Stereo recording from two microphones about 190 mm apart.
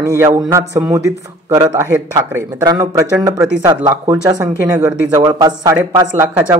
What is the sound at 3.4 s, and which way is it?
Speech, 5° right (ahead or behind).